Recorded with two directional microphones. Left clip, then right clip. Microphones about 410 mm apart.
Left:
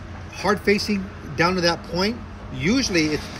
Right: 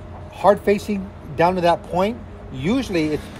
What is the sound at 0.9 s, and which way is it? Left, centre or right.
Speech, centre.